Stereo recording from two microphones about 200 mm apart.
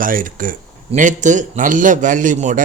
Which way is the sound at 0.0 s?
45° right (ahead or behind).